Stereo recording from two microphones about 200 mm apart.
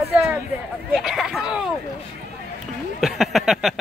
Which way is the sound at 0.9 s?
Centre (ahead or behind).